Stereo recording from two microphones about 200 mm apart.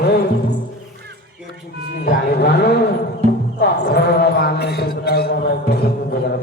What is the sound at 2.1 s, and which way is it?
Speech, 55° left (ahead or behind).